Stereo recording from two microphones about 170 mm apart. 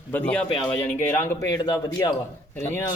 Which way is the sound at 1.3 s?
20° left (ahead or behind).